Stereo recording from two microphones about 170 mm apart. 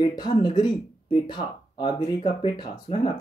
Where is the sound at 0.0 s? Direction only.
25° left (ahead or behind).